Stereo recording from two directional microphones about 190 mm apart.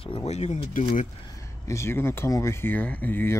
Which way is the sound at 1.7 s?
15° left (ahead or behind).